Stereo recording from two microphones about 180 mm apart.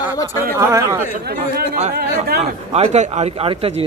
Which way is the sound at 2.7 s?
35° right (ahead or behind).